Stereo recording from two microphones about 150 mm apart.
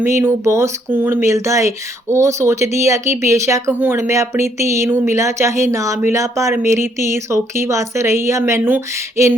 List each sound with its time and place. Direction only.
0.0 s speech: 15° right (ahead or behind)